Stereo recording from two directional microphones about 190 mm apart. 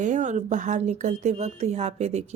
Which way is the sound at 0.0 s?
40° right (ahead or behind).